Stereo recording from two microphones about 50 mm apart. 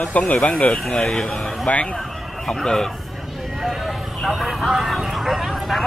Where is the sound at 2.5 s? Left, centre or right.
Centre.